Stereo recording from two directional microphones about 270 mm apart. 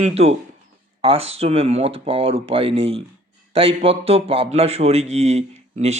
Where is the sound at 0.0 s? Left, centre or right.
Right.